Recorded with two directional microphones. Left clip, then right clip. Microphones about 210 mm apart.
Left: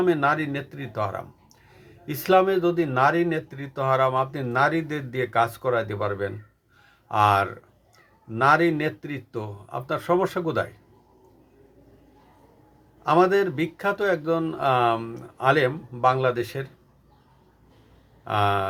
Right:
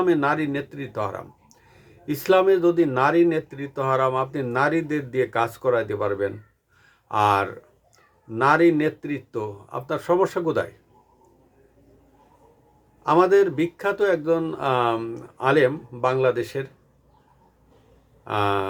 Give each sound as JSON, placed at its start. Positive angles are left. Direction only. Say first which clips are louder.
{"t": 0.0, "sound": "speech", "louder": "right 1 dB", "side_deg": -5}
{"t": 13.0, "sound": "speech", "louder": "right 2 dB", "side_deg": -5}
{"t": 18.3, "sound": "speech", "louder": "even", "side_deg": -5}